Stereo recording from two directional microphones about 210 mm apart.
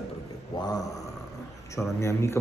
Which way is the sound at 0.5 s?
15° left (ahead or behind).